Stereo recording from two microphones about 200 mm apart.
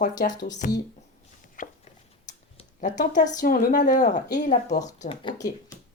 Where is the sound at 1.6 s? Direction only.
45° left (ahead or behind).